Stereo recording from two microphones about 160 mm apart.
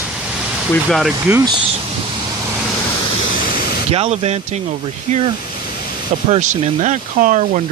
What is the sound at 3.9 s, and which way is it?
Speech, 40° right (ahead or behind).